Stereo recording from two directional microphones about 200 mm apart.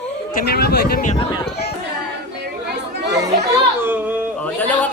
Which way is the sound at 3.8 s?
10° right (ahead or behind).